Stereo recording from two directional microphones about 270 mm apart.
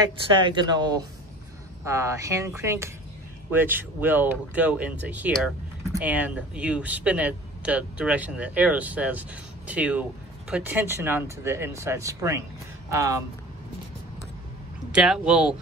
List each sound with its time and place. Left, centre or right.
0.0 s speech: centre
14.9 s speech: centre